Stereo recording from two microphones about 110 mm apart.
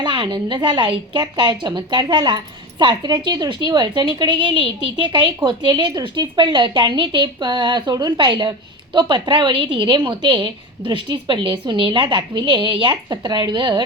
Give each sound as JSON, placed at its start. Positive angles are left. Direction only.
{"t": 0.0, "sound": "a woman's voice", "side_deg": -45}